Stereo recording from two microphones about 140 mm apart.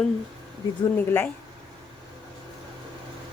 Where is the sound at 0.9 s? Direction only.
15° left (ahead or behind).